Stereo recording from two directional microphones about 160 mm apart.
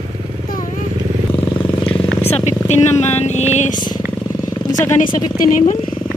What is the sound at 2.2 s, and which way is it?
Vehicle, 45° left (ahead or behind).